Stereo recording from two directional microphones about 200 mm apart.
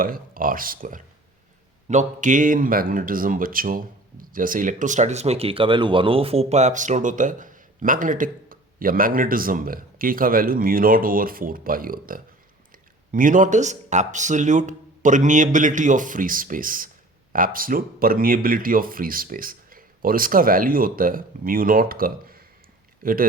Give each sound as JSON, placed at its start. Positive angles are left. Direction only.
{"t": 0.0, "sound": "speech", "side_deg": -45}